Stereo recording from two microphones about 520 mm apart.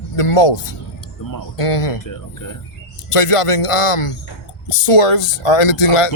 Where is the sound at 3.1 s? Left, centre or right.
Left.